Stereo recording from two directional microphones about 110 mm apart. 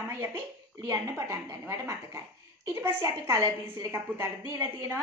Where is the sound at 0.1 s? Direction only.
20° right (ahead or behind).